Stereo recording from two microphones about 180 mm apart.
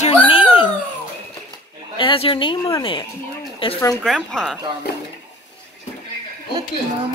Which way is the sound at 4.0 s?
5° left (ahead or behind).